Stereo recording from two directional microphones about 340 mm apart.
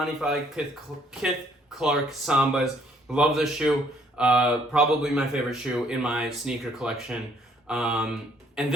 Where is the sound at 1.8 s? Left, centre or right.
Centre.